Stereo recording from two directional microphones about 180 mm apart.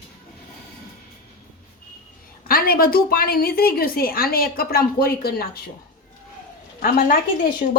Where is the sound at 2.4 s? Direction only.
55° left (ahead or behind).